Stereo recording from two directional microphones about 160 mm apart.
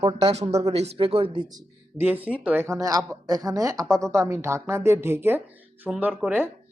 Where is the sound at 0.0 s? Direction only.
40° right (ahead or behind).